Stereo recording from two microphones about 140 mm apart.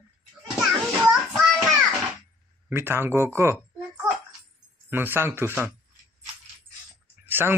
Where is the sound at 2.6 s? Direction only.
15° right (ahead or behind).